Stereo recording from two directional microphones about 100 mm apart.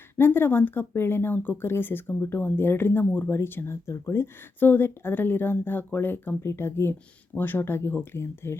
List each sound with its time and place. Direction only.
0.2 s speech: 25° left (ahead or behind)